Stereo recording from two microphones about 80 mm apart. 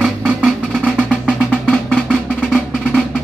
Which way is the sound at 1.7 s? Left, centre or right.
Centre.